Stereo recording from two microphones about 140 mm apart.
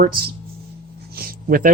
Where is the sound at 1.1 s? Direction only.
90° right.